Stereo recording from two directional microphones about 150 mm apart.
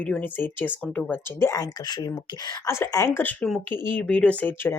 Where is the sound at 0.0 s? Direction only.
10° left (ahead or behind).